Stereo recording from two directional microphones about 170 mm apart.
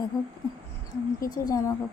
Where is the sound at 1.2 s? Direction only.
55° left (ahead or behind).